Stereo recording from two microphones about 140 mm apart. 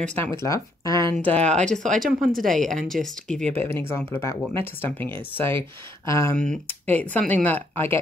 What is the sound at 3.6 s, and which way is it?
Speech, 15° left (ahead or behind).